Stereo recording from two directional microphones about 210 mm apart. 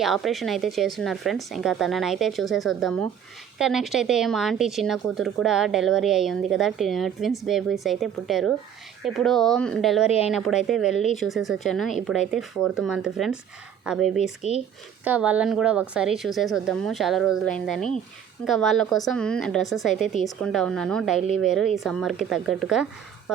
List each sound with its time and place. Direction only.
0.0 s speech: centre (ahead or behind)